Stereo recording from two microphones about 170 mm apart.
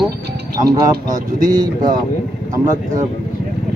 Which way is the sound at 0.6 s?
20° right (ahead or behind).